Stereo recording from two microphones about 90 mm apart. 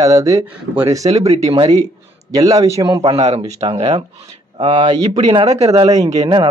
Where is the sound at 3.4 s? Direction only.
60° right (ahead or behind).